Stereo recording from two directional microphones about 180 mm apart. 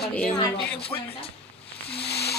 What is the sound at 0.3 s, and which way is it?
Speech, 30° left (ahead or behind).